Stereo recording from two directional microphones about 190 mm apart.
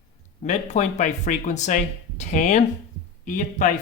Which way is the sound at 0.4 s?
35° left (ahead or behind).